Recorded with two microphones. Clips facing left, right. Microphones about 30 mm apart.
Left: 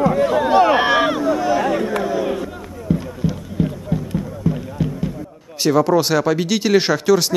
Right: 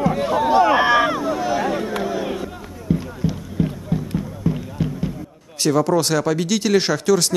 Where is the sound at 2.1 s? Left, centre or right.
Centre.